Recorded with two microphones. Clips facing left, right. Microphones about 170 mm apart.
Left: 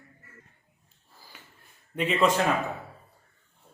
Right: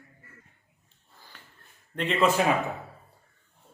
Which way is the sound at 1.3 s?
5° left (ahead or behind).